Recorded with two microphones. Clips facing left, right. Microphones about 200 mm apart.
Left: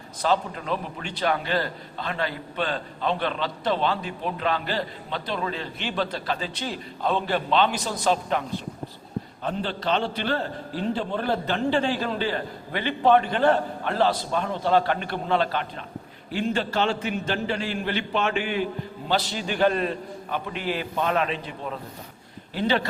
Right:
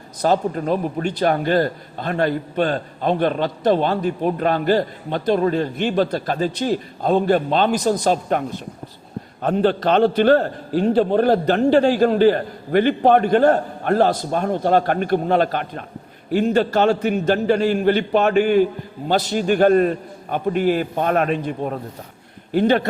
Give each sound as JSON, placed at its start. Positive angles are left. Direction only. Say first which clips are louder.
{"t": 0.2, "sound": "a man's voice", "louder": "right 6 dB", "side_deg": -45}